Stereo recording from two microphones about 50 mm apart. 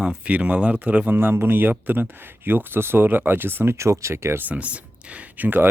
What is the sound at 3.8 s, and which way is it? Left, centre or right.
Speech, right.